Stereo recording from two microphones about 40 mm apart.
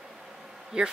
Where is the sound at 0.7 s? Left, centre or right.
Right.